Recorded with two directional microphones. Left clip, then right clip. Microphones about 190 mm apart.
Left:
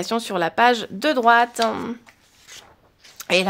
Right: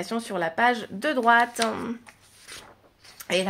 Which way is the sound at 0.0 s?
45° left (ahead or behind).